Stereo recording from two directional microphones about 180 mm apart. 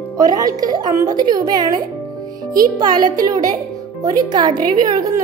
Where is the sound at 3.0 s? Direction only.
20° right (ahead or behind).